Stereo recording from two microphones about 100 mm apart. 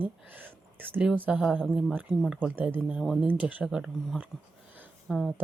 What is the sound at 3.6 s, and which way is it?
Speech, 5° right (ahead or behind).